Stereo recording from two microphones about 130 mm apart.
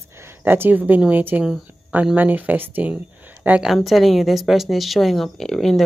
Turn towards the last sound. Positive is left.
turn(degrees=5)  # may be behind; listen again after turning